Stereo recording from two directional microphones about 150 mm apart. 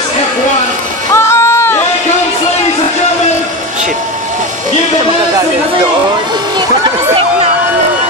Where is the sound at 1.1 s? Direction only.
15° left (ahead or behind).